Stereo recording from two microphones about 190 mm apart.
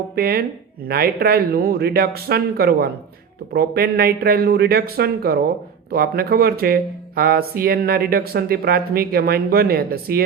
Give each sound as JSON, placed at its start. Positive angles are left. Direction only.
{"t": 0.2, "sound": "speech", "side_deg": -55}